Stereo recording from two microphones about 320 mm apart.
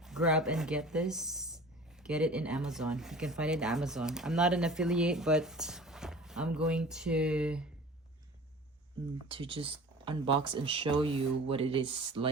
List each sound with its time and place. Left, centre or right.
0.0 s speech: centre
9.3 s speech: centre